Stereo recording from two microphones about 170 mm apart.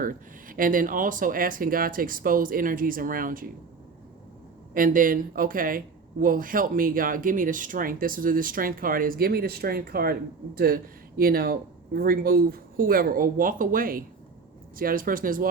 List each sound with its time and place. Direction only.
0.0 s a woman's voice: 55° right (ahead or behind)
4.7 s a woman's voice: 55° right (ahead or behind)